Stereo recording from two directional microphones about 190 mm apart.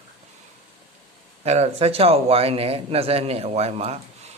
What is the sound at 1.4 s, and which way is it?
Speech, 35° right (ahead or behind).